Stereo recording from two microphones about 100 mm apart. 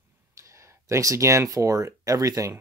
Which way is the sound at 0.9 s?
30° right (ahead or behind).